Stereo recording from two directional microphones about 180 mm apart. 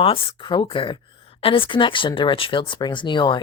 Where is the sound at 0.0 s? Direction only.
30° left (ahead or behind).